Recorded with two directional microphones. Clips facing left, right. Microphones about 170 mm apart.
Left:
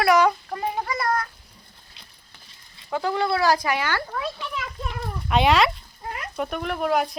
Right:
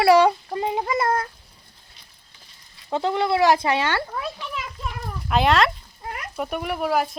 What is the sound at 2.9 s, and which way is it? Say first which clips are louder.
A child's voice: right 2 dB; 20° right (ahead or behind).